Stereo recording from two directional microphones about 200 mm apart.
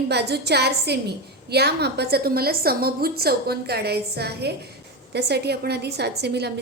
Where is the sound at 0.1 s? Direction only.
55° right (ahead or behind).